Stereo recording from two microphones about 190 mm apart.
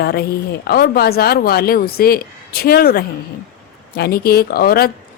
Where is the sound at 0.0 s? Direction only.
55° left (ahead or behind).